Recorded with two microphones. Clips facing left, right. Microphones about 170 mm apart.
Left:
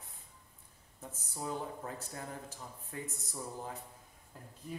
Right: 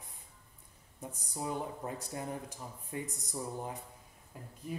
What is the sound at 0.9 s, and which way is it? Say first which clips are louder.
Speech: right 3 dB; 15° right (ahead or behind).